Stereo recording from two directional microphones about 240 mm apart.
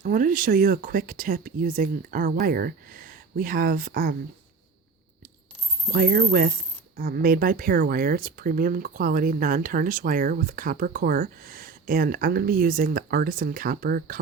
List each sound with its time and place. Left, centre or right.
0.0 s speech: right
5.9 s speech: right